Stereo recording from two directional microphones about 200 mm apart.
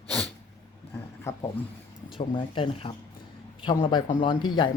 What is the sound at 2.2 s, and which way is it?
Speech, 25° left (ahead or behind).